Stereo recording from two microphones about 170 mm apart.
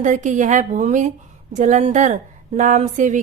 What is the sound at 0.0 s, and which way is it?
A woman's voice, 45° right (ahead or behind).